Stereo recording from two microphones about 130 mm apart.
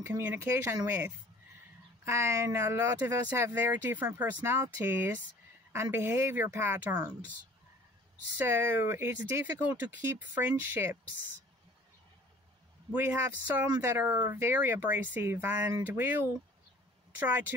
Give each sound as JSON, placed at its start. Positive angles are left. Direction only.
{"t": 0.0, "sound": "speech", "side_deg": -20}
{"t": 2.0, "sound": "speech", "side_deg": -20}
{"t": 8.4, "sound": "speech", "side_deg": -15}
{"t": 12.9, "sound": "speech", "side_deg": -20}